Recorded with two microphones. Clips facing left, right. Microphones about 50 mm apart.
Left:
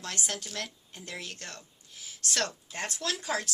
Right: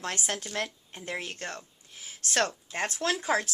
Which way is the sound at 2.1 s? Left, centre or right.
Right.